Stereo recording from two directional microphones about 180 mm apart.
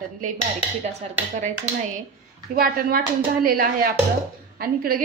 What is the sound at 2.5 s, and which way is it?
A woman's voice, 55° right (ahead or behind).